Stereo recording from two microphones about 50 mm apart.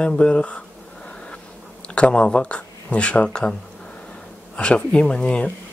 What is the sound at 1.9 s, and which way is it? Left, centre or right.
Speech, centre.